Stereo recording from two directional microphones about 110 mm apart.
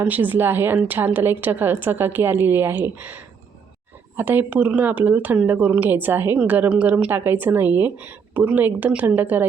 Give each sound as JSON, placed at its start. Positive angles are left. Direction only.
{"t": 0.0, "sound": "a woman's voice", "side_deg": -15}
{"t": 4.2, "sound": "speech", "side_deg": -15}